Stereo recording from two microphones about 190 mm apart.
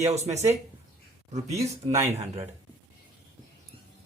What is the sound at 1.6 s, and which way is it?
Speech, 15° right (ahead or behind).